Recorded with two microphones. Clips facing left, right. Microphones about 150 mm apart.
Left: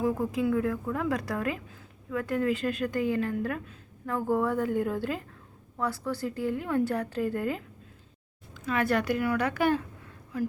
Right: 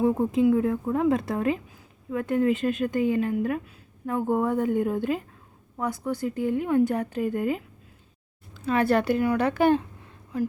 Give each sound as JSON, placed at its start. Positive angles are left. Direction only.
{"t": 0.0, "sound": "a woman's voice", "side_deg": -25}
{"t": 8.5, "sound": "speech", "side_deg": -30}